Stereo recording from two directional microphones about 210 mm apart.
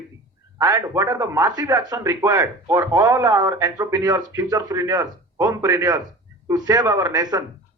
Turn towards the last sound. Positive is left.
turn(degrees=-15)  # may be behind; listen again after turning